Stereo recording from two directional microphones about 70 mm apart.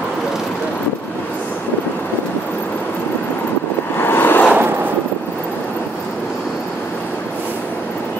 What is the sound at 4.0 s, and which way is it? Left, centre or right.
Vehicle, left.